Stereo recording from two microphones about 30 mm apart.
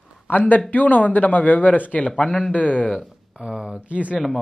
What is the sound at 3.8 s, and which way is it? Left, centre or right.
Speech, right.